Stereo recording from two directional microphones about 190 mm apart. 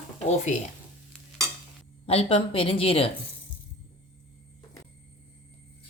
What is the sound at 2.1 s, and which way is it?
A woman's voice, 30° left (ahead or behind).